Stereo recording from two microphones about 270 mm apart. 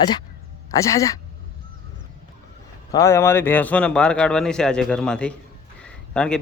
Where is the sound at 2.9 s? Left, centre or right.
Centre.